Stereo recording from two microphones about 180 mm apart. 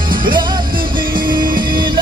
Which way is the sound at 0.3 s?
25° right (ahead or behind).